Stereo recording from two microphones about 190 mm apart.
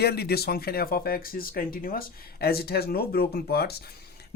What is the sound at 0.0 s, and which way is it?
Speech, 55° left (ahead or behind).